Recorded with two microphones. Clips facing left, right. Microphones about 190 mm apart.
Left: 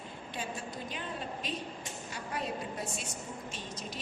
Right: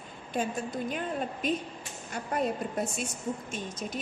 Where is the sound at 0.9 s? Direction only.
50° right (ahead or behind).